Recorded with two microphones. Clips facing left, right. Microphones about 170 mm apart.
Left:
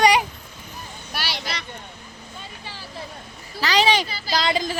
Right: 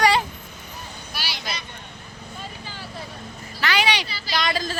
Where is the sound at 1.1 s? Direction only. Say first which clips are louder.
Left 3 dB; 65° left (ahead or behind).